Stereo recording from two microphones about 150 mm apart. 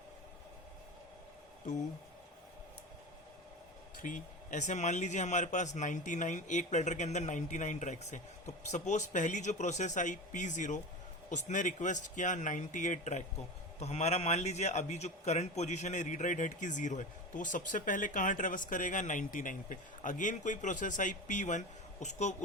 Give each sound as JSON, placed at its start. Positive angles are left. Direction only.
{"t": 4.0, "sound": "a man's voice", "side_deg": 55}